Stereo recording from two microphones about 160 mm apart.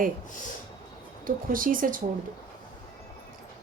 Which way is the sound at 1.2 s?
60° right (ahead or behind).